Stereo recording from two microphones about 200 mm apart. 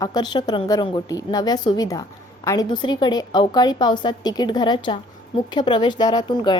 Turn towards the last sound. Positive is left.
turn(degrees=20)  # may be behind; listen again after turning